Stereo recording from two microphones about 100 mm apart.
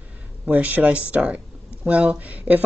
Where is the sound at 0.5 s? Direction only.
15° right (ahead or behind).